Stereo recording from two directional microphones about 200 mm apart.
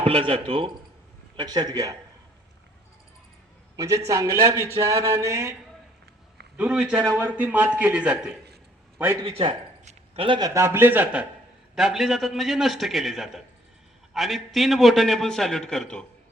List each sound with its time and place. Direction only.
0.0 s speech: 30° right (ahead or behind)
3.8 s a man's voice: 15° right (ahead or behind)
6.6 s a man's voice: 5° right (ahead or behind)
9.2 s a man's voice: 25° right (ahead or behind); by 16.0 s 5° left (ahead or behind)